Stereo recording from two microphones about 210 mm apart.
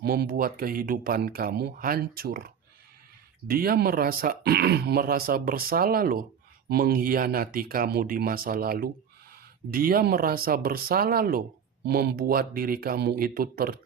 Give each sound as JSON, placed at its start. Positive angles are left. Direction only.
{"t": 0.0, "sound": "speech", "side_deg": -50}